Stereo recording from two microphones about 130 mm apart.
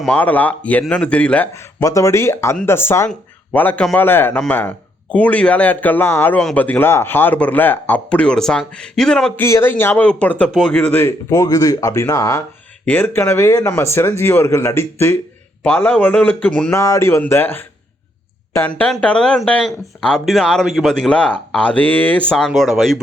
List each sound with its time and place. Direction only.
0.0 s speech: 10° left (ahead or behind)
1.5 s speech: 25° left (ahead or behind); by 9.4 s 5° left (ahead or behind)
9.4 s speech: 20° left (ahead or behind)
12.8 s speech: 15° left (ahead or behind)
16.7 s speech: 25° left (ahead or behind); by 23.0 s centre (ahead or behind)